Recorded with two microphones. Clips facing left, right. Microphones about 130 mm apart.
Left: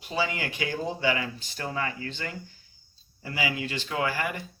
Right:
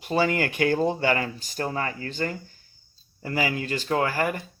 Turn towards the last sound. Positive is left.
turn(degrees=-45)  # may be behind; listen again after turning